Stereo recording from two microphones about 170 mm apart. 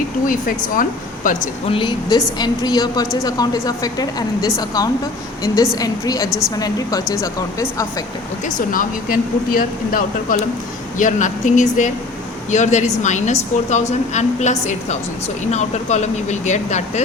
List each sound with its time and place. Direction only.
0.3 s a woman's voice: 50° left (ahead or behind)
1.6 s a woman's voice: 30° left (ahead or behind)
8.4 s a woman's voice: 50° left (ahead or behind)